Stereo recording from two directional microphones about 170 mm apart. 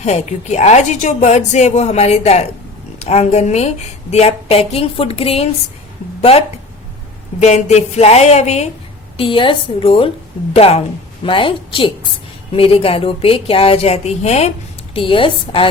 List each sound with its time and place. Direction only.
0.0 s a woman's voice: 40° left (ahead or behind)
7.3 s a woman's voice: 40° left (ahead or behind)